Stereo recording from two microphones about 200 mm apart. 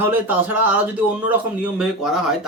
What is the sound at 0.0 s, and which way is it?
Speech, 10° right (ahead or behind).